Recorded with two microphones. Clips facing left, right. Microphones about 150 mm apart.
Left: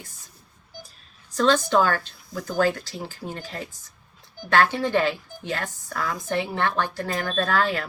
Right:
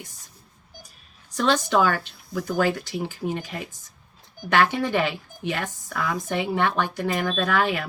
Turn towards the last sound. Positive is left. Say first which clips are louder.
# even
turn(degrees=-15)  # may be behind; listen again after turning